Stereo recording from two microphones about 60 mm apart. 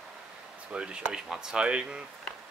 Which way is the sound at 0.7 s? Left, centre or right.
Centre.